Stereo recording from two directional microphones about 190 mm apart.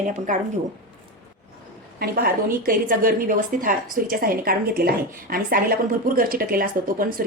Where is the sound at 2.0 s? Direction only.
55° right (ahead or behind).